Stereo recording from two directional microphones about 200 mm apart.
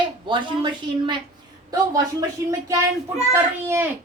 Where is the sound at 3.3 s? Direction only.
10° right (ahead or behind).